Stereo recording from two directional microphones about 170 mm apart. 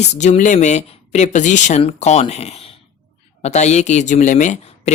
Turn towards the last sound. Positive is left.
turn(degrees=45)  # may be behind; listen again after turning